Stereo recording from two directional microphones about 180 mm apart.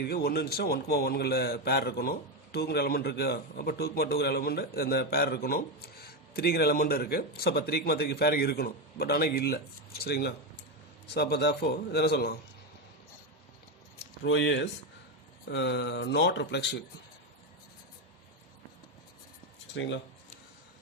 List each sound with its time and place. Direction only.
0.0 s a man's voice: 60° left (ahead or behind)
14.3 s speech: 85° left
19.8 s speech: 90° left